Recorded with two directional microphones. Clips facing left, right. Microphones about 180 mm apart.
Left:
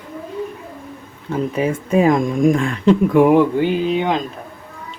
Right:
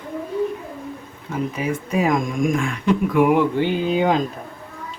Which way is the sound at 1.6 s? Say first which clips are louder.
Left 7 dB; 30° left (ahead or behind).